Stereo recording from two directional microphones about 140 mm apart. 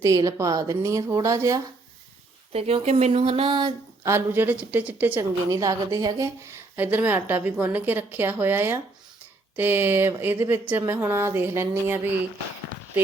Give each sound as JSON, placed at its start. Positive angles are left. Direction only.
{"t": 0.0, "sound": "a woman's voice", "side_deg": -25}
{"t": 2.5, "sound": "speech", "side_deg": -45}
{"t": 4.0, "sound": "speech", "side_deg": -15}
{"t": 5.5, "sound": "a woman's voice", "side_deg": -25}
{"t": 6.7, "sound": "speech", "side_deg": -15}